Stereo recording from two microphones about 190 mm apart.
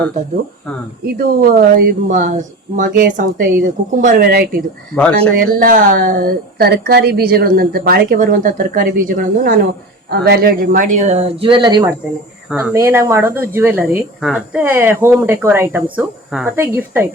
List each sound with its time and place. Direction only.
1.0 s speech: 55° right (ahead or behind)
2.0 s speech: 40° right (ahead or behind)
4.9 s speech: 5° left (ahead or behind)
5.3 s speech: 50° right (ahead or behind)
11.3 s speech: 25° right (ahead or behind)
12.5 s speech: 5° right (ahead or behind)